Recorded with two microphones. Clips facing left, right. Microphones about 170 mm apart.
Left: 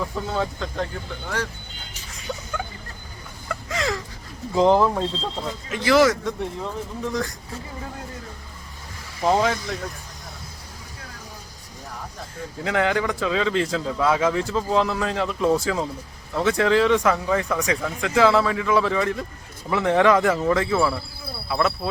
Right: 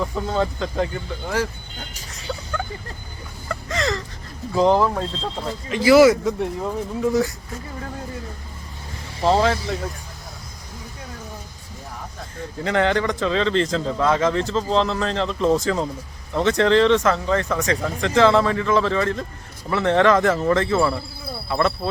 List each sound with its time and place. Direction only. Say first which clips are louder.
0.0 s speech: right 3 dB; centre (ahead or behind)
3.5 s a sound: right 2 dB; 5° left (ahead or behind)
4.5 s speech: even; 15° left (ahead or behind)
4.9 s speech: even; centre (ahead or behind)
9.4 s speech: right 3 dB; centre (ahead or behind)
12.4 s speech: right 2 dB; 5° left (ahead or behind)